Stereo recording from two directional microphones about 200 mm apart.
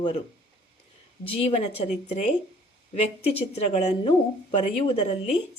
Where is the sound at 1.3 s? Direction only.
30° left (ahead or behind).